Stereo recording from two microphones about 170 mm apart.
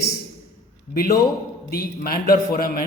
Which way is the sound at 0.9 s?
60° left (ahead or behind).